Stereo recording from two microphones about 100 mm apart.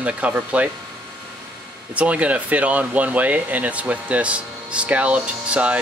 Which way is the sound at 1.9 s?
15° right (ahead or behind).